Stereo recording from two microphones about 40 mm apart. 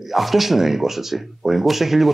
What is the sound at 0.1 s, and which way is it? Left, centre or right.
Speech, centre.